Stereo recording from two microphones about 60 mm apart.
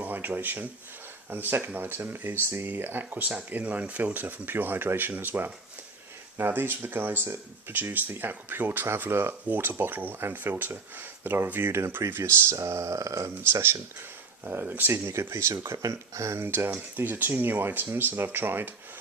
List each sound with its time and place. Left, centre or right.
0.0 s speech: right
14.4 s speech: right
15.2 s speech: right